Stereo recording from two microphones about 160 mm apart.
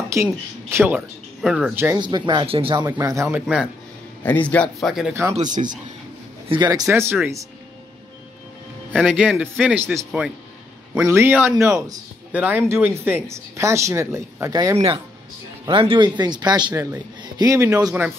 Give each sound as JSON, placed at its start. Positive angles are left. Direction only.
{"t": 0.1, "sound": "speech", "side_deg": -15}
{"t": 2.0, "sound": "speech", "side_deg": -30}
{"t": 2.9, "sound": "speech", "side_deg": -20}
{"t": 3.3, "sound": "speech", "side_deg": -5}
{"t": 4.2, "sound": "a man's voice", "side_deg": 10}
{"t": 5.3, "sound": "speech", "side_deg": -50}
{"t": 6.5, "sound": "speech", "side_deg": -25}
{"t": 8.9, "sound": "a man's voice", "side_deg": -5}
{"t": 11.1, "sound": "speech", "side_deg": -15}
{"t": 15.6, "sound": "speech", "side_deg": -35}